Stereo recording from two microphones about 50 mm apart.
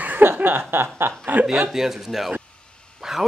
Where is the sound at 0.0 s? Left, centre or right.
Right.